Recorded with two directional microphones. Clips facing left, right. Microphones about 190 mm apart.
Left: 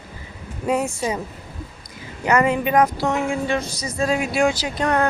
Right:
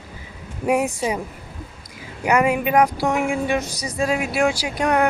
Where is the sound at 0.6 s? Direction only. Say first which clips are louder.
Right 2 dB; 15° right (ahead or behind).